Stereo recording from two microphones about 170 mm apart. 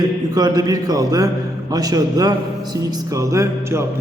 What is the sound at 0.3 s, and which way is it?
A man's voice, 25° right (ahead or behind).